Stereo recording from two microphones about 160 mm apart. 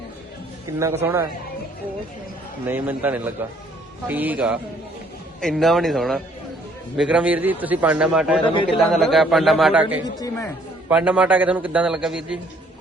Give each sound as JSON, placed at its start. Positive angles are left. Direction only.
{"t": 0.8, "sound": "a man's voice", "side_deg": -15}
{"t": 2.6, "sound": "a man's voice", "side_deg": -10}
{"t": 5.4, "sound": "a man's voice", "side_deg": 0}
{"t": 10.2, "sound": "speech", "side_deg": 15}
{"t": 10.8, "sound": "a man's voice", "side_deg": -10}